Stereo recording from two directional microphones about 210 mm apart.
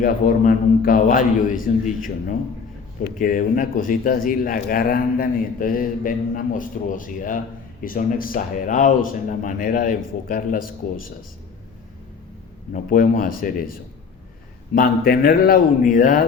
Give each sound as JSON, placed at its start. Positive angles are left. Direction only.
{"t": 0.0, "sound": "a man's voice", "side_deg": 40}
{"t": 12.7, "sound": "a man's voice", "side_deg": 40}
{"t": 14.8, "sound": "speech", "side_deg": 45}